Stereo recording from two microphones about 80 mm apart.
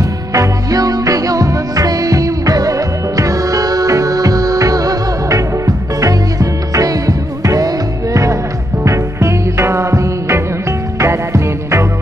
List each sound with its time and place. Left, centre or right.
0.0 s music: right